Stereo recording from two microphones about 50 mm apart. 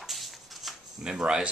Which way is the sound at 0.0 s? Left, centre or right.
Centre.